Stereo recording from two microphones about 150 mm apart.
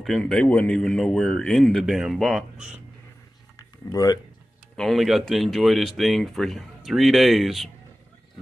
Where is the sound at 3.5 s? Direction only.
25° left (ahead or behind).